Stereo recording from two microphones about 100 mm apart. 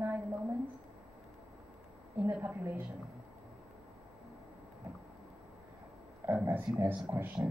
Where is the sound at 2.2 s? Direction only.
20° right (ahead or behind).